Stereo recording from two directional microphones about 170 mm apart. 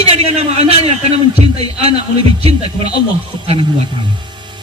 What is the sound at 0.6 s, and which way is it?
Speech, 35° right (ahead or behind).